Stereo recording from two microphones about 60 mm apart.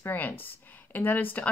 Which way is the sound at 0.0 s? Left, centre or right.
Left.